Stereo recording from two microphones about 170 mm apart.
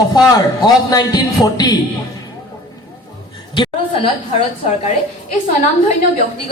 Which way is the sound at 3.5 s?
30° left (ahead or behind).